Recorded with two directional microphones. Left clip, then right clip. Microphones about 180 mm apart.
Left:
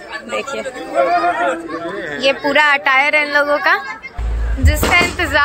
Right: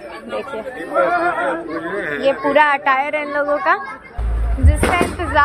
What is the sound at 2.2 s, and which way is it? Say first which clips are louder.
Speech: left 1 dB; centre (ahead or behind).